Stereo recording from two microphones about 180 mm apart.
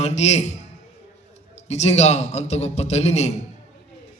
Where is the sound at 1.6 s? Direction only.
35° left (ahead or behind).